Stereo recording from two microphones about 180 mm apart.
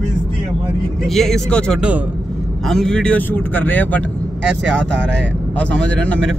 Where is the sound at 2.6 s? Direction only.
5° left (ahead or behind).